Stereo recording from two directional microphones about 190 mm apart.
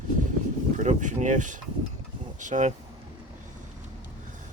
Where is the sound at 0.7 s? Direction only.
40° right (ahead or behind).